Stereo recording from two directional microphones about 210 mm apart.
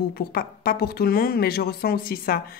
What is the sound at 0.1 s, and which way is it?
A woman's voice, 45° left (ahead or behind).